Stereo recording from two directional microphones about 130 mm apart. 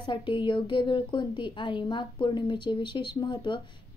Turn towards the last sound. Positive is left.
turn(degrees=35)  # may be behind; listen again after turning